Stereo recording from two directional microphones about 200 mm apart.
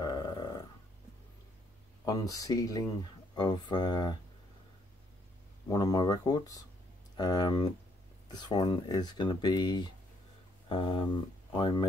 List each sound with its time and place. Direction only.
0.0 s a sound: 20° left (ahead or behind)
2.0 s speech: 15° left (ahead or behind)
5.7 s speech: 20° left (ahead or behind)